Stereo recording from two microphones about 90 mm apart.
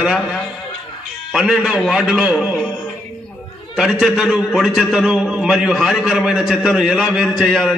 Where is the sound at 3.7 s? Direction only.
Centre (ahead or behind).